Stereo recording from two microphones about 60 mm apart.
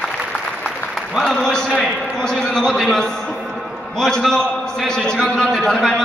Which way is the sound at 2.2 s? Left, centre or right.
Centre.